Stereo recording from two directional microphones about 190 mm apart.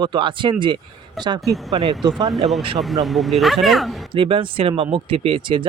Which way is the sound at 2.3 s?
Centre (ahead or behind).